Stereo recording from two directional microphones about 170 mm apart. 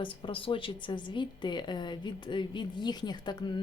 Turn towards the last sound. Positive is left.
turn(degrees=25)  # may be behind; listen again after turning